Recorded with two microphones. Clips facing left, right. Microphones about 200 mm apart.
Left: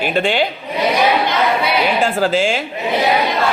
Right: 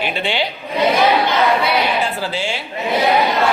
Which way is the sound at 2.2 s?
45° left (ahead or behind).